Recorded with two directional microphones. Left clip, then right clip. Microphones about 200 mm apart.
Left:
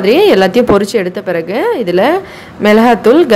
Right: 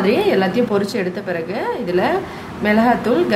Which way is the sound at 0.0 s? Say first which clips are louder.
Left 9 dB; 40° left (ahead or behind).